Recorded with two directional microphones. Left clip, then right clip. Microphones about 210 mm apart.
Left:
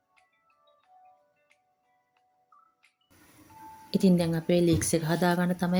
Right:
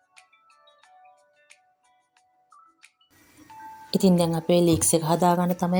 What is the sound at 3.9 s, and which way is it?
A woman's voice, 5° right (ahead or behind).